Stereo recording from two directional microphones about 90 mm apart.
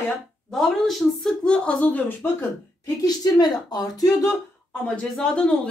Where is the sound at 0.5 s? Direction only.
Centre (ahead or behind); by 2.5 s 20° left (ahead or behind).